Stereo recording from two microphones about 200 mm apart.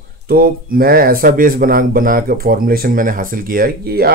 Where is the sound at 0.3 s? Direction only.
50° right (ahead or behind).